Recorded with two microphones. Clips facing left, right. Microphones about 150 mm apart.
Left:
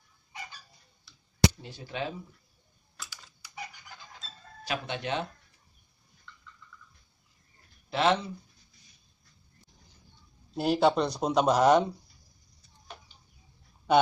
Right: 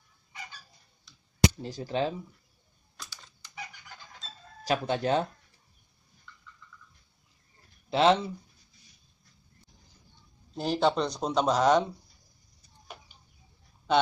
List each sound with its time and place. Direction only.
1.6 s speech: 40° right (ahead or behind)
3.0 s a sound: 10° left (ahead or behind)
4.6 s speech: 40° right (ahead or behind)
7.9 s speech: 30° right (ahead or behind)
10.5 s speech: 5° left (ahead or behind)